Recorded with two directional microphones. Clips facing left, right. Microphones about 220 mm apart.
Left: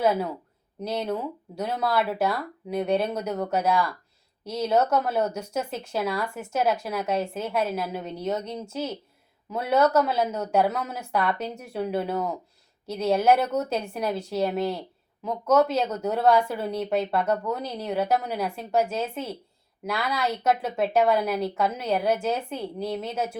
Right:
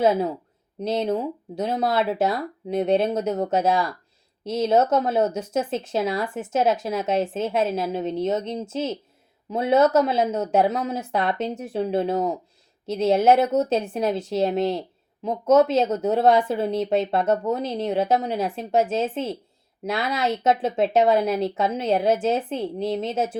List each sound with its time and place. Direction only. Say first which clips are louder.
0.0 s speech: right 4 dB; 25° right (ahead or behind)